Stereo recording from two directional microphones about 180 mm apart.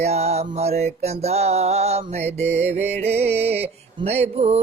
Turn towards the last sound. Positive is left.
turn(degrees=-35)  # may be behind; listen again after turning